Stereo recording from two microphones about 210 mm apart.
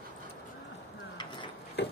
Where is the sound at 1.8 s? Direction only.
55° left (ahead or behind).